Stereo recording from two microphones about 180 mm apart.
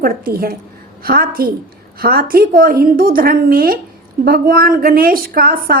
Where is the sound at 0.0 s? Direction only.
55° right (ahead or behind).